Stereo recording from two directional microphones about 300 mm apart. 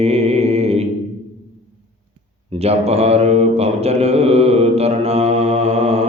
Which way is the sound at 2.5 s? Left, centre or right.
Right.